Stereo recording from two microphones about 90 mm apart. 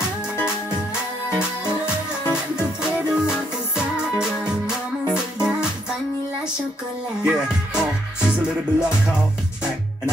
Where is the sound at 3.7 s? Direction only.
10° right (ahead or behind).